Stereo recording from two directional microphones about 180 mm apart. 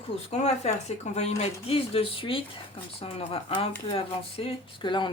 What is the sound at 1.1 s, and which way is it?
Speech, 35° left (ahead or behind).